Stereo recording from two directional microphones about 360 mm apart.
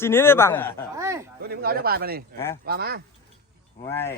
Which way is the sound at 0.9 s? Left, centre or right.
Centre.